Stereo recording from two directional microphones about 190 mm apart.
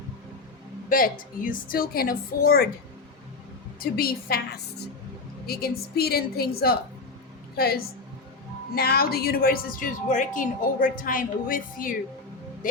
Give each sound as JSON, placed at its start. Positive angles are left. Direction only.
{"t": 0.9, "sound": "a woman's voice", "side_deg": 45}
{"t": 3.8, "sound": "a woman's voice", "side_deg": 50}
{"t": 5.5, "sound": "a woman's voice", "side_deg": 55}